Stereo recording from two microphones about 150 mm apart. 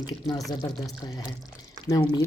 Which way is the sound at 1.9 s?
30° left (ahead or behind).